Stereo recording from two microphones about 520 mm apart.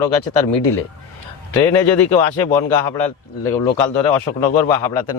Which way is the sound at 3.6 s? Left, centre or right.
Left.